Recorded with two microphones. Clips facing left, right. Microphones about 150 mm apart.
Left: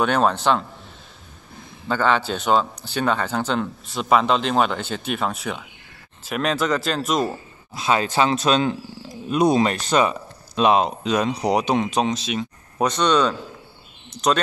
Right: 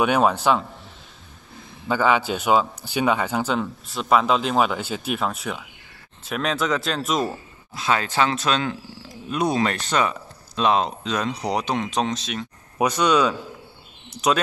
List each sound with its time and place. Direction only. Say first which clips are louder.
0.0 s speech: even; 10° right (ahead or behind)
1.9 s speech: even; 10° right (ahead or behind)
7.7 s speech: left 2 dB; 15° left (ahead or behind)
12.7 s speech: even; 10° right (ahead or behind)